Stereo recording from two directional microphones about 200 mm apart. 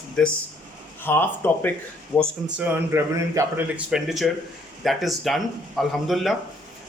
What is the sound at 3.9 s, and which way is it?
A man's voice, centre (ahead or behind).